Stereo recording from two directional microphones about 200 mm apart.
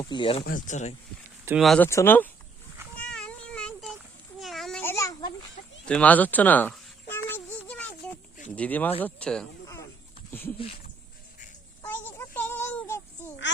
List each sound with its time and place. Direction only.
0.0 s speech: 25° left (ahead or behind)
0.4 s speech: 40° left (ahead or behind)
1.5 s speech: centre (ahead or behind)
1.9 s speech: 10° left (ahead or behind)
2.9 s a sound: 5° left (ahead or behind)
4.8 s baby cry: 15° left (ahead or behind)
5.8 s a sound: 5° left (ahead or behind)
8.4 s speech: 5° left (ahead or behind)
9.6 s cricket: 15° left (ahead or behind)
11.9 s child singing: 10° left (ahead or behind)